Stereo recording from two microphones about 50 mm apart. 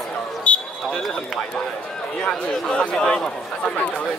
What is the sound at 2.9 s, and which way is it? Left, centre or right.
Speech, centre.